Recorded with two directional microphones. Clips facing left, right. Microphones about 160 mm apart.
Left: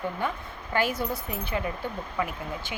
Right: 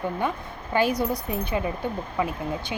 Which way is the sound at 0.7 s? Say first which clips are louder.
Right 4 dB; 15° right (ahead or behind).